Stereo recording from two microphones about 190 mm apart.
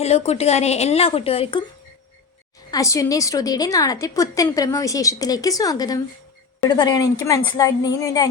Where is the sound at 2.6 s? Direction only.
15° left (ahead or behind).